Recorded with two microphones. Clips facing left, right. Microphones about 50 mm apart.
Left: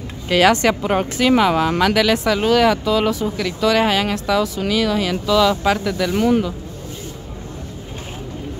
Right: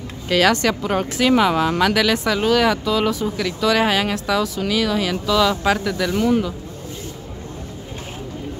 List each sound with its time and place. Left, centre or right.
0.3 s speech: centre
1.3 s speech: centre
6.1 s speech: left